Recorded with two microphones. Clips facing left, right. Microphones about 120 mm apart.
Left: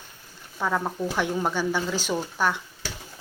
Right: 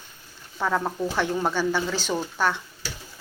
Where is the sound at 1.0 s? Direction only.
10° left (ahead or behind).